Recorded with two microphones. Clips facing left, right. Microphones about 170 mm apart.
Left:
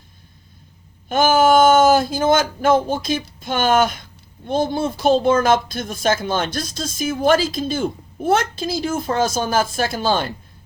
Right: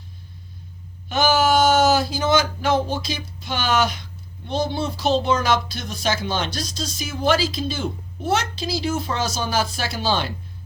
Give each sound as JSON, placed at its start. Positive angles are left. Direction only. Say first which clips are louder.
{"t": 1.0, "sound": "speech", "louder": "left 4 dB", "side_deg": 50}